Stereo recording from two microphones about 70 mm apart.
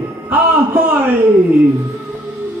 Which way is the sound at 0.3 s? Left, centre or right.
Right.